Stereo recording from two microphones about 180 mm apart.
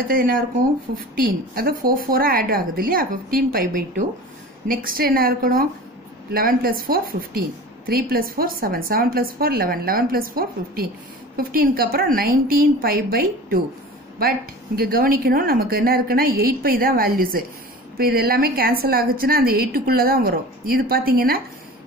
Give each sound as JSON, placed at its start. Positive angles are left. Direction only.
{"t": 0.1, "sound": "a woman's voice", "side_deg": -50}
{"t": 14.8, "sound": "a woman's voice", "side_deg": -55}